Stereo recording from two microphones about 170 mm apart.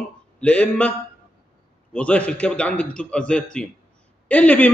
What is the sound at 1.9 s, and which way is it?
A man's voice, 5° left (ahead or behind).